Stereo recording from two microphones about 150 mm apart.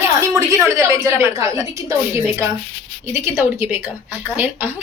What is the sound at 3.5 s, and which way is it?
Speech, 15° right (ahead or behind).